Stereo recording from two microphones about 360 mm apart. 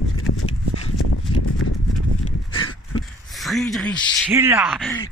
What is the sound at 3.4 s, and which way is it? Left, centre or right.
Speech, centre.